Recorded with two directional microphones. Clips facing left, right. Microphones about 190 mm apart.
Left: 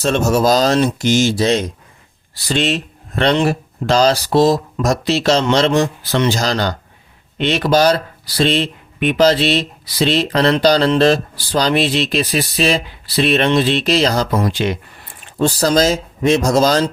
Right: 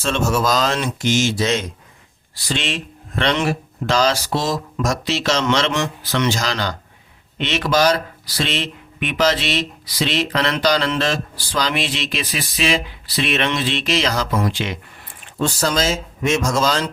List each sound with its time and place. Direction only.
0.0 s speech: 40° left (ahead or behind)